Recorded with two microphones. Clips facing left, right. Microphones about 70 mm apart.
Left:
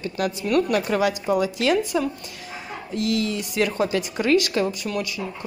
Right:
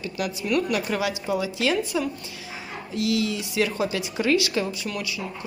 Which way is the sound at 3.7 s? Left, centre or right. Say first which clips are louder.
Left 3 dB; left.